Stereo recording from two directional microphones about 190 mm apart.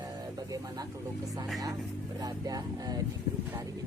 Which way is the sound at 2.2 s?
20° right (ahead or behind).